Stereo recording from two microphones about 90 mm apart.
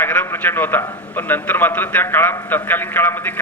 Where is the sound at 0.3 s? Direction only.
25° left (ahead or behind).